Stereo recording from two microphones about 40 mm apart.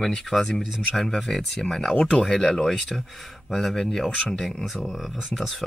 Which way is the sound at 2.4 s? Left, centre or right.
Centre.